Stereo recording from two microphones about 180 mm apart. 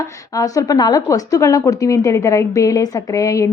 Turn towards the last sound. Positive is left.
turn(degrees=15)  # may be behind; listen again after turning